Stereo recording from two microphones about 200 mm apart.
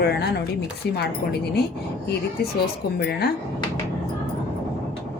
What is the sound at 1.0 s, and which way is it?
Speech, 55° left (ahead or behind).